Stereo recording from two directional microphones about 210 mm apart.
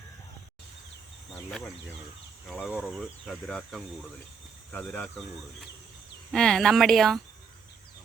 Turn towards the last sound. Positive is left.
turn(degrees=0)  # may be behind; listen again after turning